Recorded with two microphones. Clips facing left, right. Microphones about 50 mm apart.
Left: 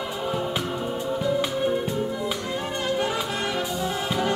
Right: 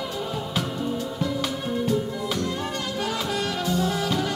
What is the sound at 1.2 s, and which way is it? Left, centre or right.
Music, centre.